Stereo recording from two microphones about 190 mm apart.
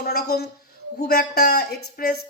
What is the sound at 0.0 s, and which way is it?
A woman's voice, 55° left (ahead or behind).